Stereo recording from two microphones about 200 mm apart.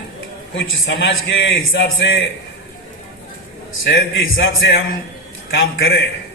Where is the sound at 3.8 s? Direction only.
70° left (ahead or behind).